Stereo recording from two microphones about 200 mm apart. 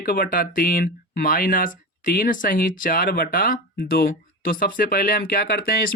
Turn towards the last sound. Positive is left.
turn(degrees=50)  # may be behind; listen again after turning